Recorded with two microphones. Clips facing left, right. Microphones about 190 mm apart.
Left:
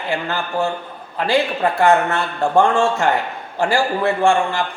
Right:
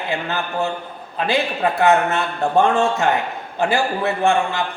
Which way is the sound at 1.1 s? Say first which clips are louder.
Left 2 dB; 20° right (ahead or behind).